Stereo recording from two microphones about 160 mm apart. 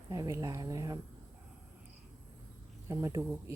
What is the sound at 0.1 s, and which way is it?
Speech, 20° right (ahead or behind).